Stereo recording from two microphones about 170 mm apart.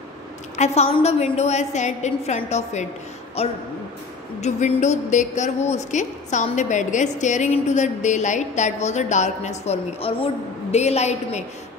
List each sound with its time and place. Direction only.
0.6 s a woman's voice: 40° left (ahead or behind)